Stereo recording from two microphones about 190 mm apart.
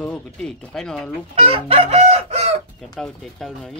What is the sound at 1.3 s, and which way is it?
Chicken, 30° right (ahead or behind).